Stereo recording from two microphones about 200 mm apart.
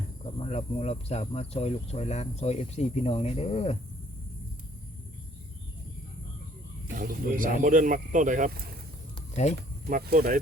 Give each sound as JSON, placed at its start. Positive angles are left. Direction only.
{"t": 0.3, "sound": "speech", "side_deg": 30}
{"t": 6.9, "sound": "speech", "side_deg": -45}
{"t": 9.3, "sound": "speech", "side_deg": 35}
{"t": 9.6, "sound": "speech", "side_deg": -45}